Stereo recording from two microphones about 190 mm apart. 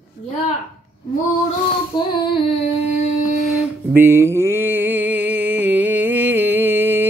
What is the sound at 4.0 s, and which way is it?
Mantra, 10° right (ahead or behind).